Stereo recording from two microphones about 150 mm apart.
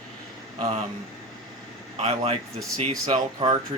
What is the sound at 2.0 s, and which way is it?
Speech, 45° right (ahead or behind).